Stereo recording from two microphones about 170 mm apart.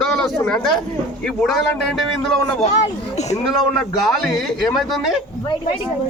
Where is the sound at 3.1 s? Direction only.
40° left (ahead or behind).